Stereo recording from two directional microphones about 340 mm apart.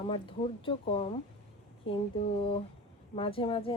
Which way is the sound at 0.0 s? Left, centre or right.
Centre.